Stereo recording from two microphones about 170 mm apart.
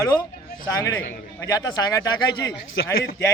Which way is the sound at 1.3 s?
20° left (ahead or behind).